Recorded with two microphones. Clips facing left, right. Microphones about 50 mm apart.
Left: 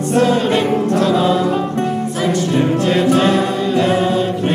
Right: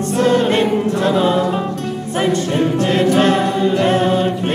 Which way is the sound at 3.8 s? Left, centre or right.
Right.